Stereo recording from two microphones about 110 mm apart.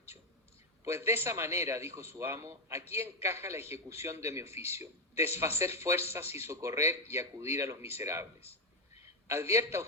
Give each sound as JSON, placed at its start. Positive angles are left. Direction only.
{"t": 0.9, "sound": "a man's voice", "side_deg": -25}